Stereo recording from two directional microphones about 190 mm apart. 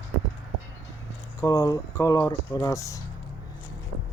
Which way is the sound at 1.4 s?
15° left (ahead or behind).